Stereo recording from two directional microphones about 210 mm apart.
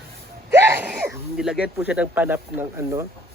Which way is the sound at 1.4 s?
5° right (ahead or behind).